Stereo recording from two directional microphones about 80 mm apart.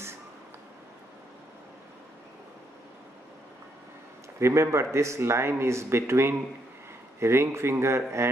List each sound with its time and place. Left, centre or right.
4.4 s speech: right